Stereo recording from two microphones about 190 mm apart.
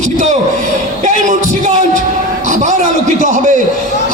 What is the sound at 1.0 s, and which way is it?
A man's voice, 40° right (ahead or behind).